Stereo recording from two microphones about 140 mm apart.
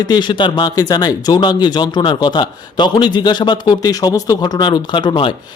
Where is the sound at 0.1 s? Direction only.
35° left (ahead or behind).